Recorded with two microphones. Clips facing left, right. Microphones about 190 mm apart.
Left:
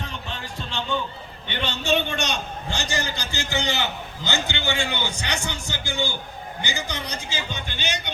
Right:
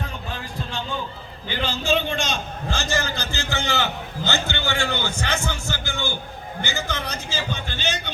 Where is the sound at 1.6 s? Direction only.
70° left (ahead or behind).